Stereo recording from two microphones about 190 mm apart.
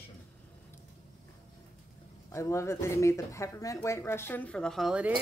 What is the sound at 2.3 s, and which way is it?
Speech, 15° left (ahead or behind).